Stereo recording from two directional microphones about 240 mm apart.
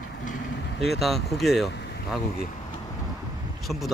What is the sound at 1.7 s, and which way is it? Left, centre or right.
Boat, left.